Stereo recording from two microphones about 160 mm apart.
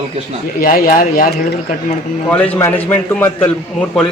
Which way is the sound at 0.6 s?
55° left (ahead or behind).